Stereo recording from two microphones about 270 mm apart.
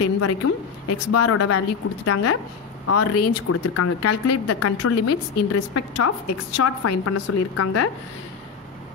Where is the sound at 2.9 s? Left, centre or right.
Left.